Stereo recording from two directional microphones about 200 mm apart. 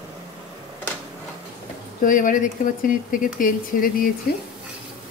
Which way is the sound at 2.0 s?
45° left (ahead or behind).